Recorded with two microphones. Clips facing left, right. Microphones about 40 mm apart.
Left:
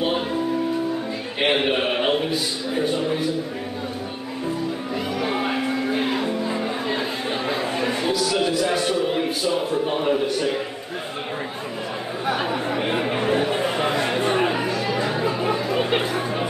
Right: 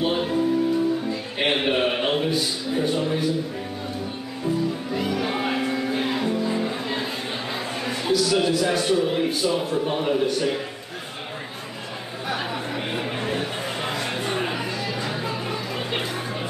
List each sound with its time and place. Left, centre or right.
0.0 s music: centre
1.4 s a sound: centre
4.9 s music: centre
8.0 s a man's voice: centre
13.3 s chatter: centre